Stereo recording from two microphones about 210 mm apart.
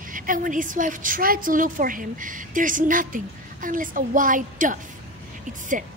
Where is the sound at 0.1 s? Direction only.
40° right (ahead or behind).